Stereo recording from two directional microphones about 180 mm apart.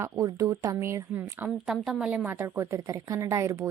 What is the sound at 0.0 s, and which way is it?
A woman's voice, 20° right (ahead or behind).